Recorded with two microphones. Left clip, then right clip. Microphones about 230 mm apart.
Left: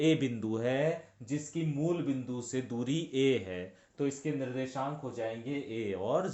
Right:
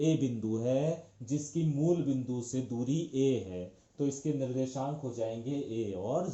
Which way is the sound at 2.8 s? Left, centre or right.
Left.